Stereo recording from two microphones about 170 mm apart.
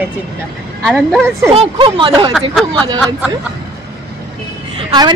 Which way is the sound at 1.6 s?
30° right (ahead or behind).